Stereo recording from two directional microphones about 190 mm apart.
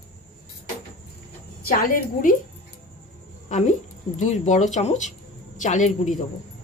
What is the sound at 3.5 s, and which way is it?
Speech, 40° left (ahead or behind).